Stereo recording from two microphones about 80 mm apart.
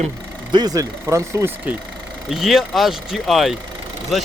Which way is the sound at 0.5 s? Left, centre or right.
Right.